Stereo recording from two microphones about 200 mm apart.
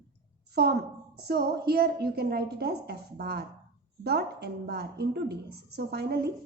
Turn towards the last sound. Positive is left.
turn(degrees=-55)  # may be behind; listen again after turning